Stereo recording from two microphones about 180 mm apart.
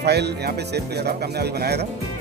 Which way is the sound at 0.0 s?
65° right (ahead or behind).